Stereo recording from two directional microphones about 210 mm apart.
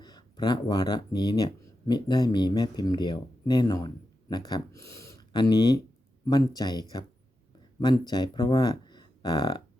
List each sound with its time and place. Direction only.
0.0 s speech: 20° left (ahead or behind)